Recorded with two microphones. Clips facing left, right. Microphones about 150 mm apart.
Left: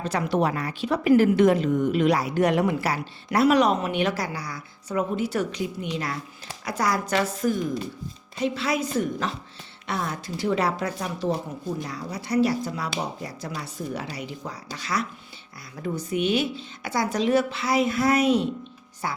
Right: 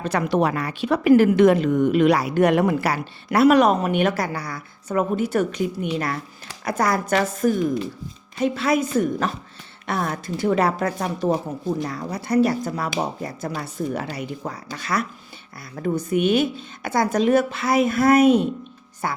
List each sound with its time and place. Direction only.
0.0 s speech: 60° right (ahead or behind)